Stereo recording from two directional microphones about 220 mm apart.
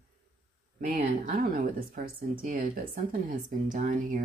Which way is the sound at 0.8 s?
40° right (ahead or behind).